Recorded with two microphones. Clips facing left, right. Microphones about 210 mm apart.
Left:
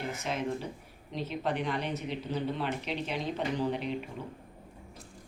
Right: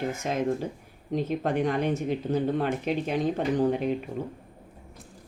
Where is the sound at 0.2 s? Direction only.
45° right (ahead or behind).